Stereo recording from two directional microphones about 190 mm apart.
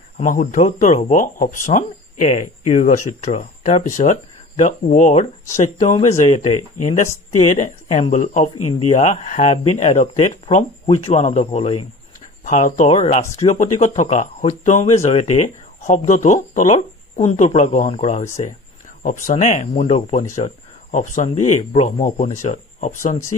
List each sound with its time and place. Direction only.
0.2 s speech: 45° left (ahead or behind)